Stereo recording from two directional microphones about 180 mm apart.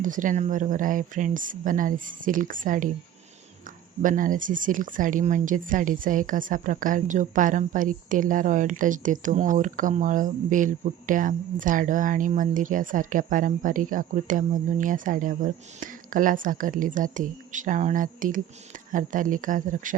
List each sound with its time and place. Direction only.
0.0 s speech: 45° right (ahead or behind)
4.0 s speech: 45° right (ahead or behind)